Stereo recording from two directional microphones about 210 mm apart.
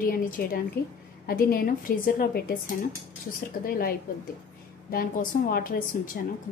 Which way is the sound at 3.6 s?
45° left (ahead or behind).